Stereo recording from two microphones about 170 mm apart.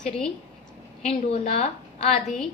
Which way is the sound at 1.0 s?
40° left (ahead or behind).